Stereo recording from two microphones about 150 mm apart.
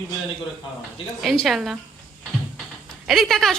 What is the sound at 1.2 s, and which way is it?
Speech, centre (ahead or behind).